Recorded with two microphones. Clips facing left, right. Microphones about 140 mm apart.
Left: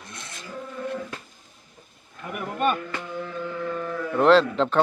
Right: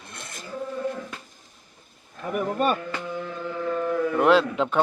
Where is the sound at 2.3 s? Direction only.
40° right (ahead or behind).